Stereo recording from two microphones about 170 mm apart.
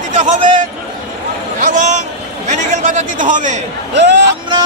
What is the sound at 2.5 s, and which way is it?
Chatter, 45° right (ahead or behind).